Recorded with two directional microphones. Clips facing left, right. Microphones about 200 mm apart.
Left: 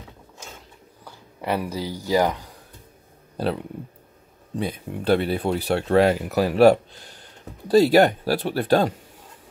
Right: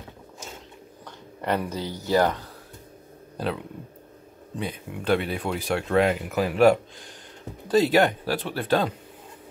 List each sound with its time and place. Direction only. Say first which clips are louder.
1.0 s speech: left 1 dB; 10° left (ahead or behind)
4.6 s speech: left 4 dB; 35° left (ahead or behind)